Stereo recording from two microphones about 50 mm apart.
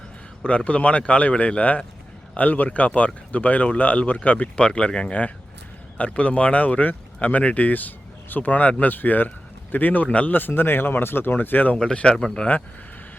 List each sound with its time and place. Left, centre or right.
0.4 s speech: left
4.5 s speech: left
10.3 s speech: left
11.8 s speech: centre